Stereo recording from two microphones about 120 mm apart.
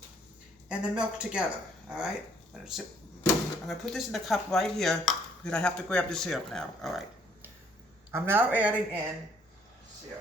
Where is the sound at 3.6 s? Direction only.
Centre (ahead or behind).